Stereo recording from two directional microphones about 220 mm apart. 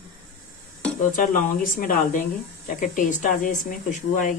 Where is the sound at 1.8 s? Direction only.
40° left (ahead or behind).